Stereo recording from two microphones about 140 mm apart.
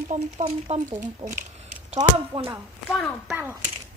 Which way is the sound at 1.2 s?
75° right (ahead or behind).